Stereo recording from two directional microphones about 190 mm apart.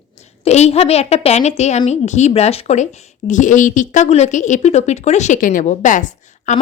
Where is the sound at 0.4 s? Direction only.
35° left (ahead or behind).